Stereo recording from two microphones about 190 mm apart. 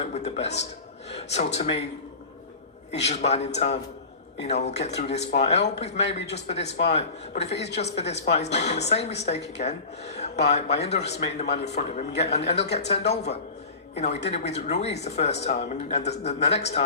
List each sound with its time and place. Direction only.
0.0 s speech: 35° left (ahead or behind)
2.9 s speech: 35° left (ahead or behind)